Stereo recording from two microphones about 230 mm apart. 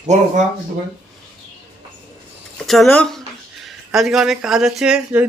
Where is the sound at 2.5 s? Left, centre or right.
Centre.